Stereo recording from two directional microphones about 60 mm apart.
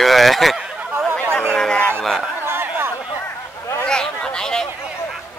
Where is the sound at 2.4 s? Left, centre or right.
Right.